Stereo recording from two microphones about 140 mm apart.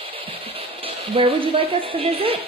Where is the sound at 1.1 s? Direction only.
40° right (ahead or behind).